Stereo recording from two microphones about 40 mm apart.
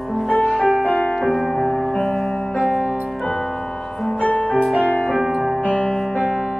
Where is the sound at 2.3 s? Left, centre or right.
Centre.